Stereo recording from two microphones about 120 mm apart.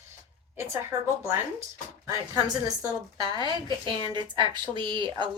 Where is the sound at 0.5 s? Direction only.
25° right (ahead or behind).